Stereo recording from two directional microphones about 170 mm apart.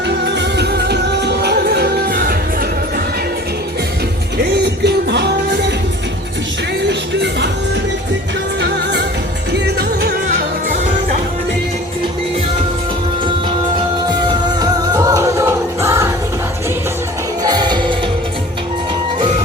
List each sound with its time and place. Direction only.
0.3 s music: 85° right; by 2.6 s 60° right (ahead or behind)
4.5 s music: 80° right
6.8 s music: 90° right
8.6 s music: 90° right
9.5 s music: 75° right (ahead or behind)
14.6 s music: 20° right (ahead or behind)
17.4 s music: 25° right (ahead or behind)